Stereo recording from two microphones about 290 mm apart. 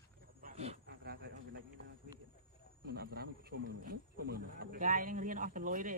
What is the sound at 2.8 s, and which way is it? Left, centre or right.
Speech, right.